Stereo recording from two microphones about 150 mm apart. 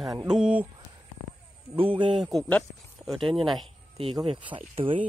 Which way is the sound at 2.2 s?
Centre (ahead or behind).